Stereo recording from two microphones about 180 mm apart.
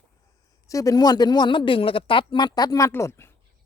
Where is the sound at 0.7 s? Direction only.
20° left (ahead or behind).